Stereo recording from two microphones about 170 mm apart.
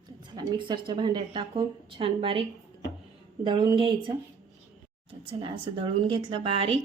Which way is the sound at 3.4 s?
30° right (ahead or behind).